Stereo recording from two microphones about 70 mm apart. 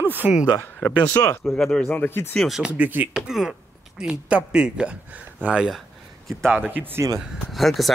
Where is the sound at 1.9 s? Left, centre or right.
Left.